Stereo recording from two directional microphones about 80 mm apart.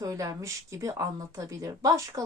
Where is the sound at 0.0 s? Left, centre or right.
Right.